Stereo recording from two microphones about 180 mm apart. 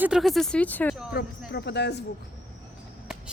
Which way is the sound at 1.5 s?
65° left (ahead or behind).